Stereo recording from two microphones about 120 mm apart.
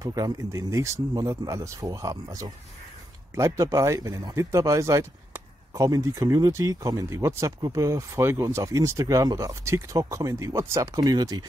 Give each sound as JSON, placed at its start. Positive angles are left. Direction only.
{"t": 0.0, "sound": "speech", "side_deg": -30}